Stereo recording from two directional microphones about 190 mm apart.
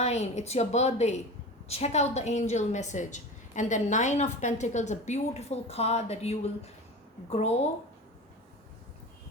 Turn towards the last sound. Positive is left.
turn(degrees=35)  # may be behind; listen again after turning